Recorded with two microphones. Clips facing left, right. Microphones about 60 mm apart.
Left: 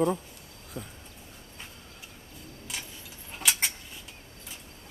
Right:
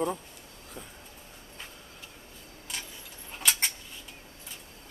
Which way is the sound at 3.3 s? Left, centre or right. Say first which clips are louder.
Even; centre.